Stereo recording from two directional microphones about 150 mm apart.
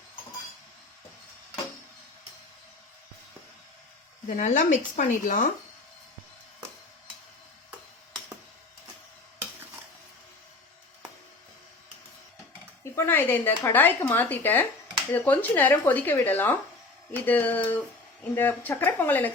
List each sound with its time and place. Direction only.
4.4 s speech: 55° left (ahead or behind)
12.8 s speech: 15° left (ahead or behind)